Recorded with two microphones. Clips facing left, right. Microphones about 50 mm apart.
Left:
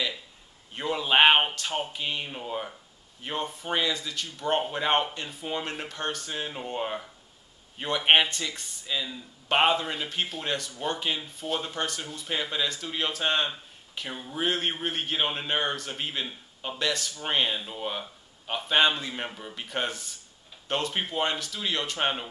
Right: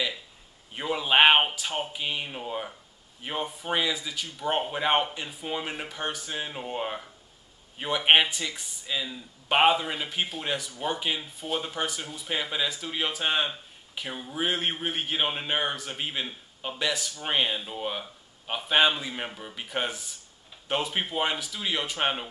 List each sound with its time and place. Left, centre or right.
0.7 s speech: centre